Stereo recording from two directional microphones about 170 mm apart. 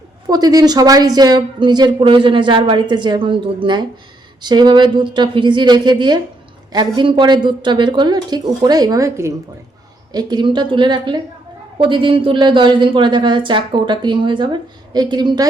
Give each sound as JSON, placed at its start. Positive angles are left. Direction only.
{"t": 0.3, "sound": "speech", "side_deg": -20}